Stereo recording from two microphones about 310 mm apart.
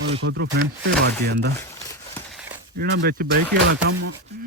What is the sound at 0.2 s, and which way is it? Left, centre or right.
Speech, right.